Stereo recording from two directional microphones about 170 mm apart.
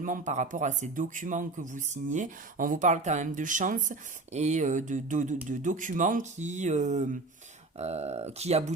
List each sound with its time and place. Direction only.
0.0 s speech: 50° right (ahead or behind)